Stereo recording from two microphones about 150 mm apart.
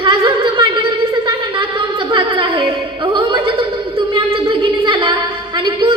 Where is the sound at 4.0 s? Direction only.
35° right (ahead or behind).